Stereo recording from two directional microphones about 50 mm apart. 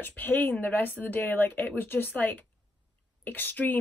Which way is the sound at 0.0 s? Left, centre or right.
Left.